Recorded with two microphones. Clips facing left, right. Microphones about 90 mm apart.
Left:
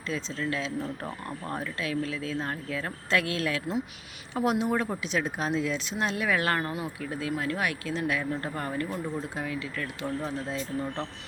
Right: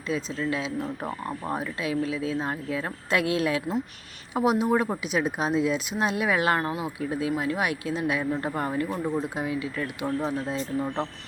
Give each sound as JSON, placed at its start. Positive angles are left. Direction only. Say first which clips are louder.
{"t": 0.1, "sound": "speech", "louder": "right 3 dB", "side_deg": -10}
{"t": 4.4, "sound": "speech", "louder": "right 4 dB", "side_deg": -5}